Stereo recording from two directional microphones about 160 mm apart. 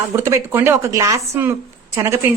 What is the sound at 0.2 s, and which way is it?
A woman's voice, 15° right (ahead or behind).